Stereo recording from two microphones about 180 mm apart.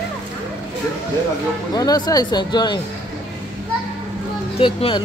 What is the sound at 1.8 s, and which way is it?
A woman's voice, 20° left (ahead or behind).